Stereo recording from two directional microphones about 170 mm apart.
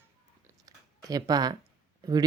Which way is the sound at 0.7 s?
20° right (ahead or behind).